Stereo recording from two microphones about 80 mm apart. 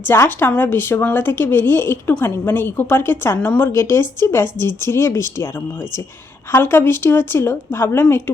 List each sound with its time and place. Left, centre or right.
0.1 s a woman's voice: left
6.5 s a woman's voice: left